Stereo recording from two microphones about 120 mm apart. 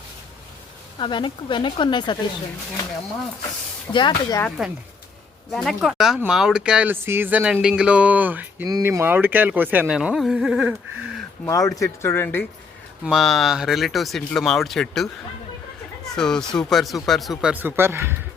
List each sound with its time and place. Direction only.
0.9 s speech: 40° left (ahead or behind)
3.9 s speech: 40° left (ahead or behind)
5.5 s speech: centre (ahead or behind)
6.9 s speech: 20° right (ahead or behind)
8.6 s speech: 25° right (ahead or behind); by 10.8 s 5° right (ahead or behind)
11.4 s speech: 30° left (ahead or behind)
13.1 s speech: centre (ahead or behind)
16.1 s speech: 5° left (ahead or behind)
17.5 s speech: 15° right (ahead or behind)